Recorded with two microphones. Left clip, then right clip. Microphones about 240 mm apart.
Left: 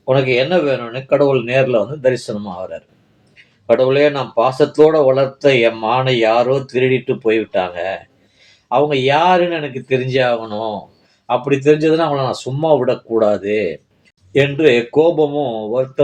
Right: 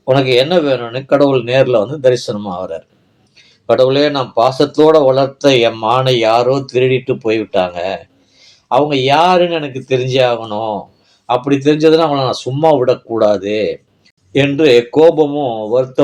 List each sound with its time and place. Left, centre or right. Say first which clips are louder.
0.0 s speech: right 3 dB; right
3.7 s speech: right 2 dB; right